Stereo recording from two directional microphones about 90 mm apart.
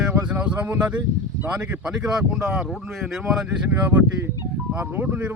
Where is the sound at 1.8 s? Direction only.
10° right (ahead or behind).